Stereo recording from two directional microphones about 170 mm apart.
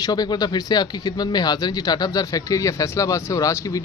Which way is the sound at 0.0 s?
25° left (ahead or behind).